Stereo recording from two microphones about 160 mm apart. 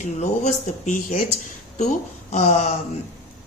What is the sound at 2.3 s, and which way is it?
Speech, 45° left (ahead or behind).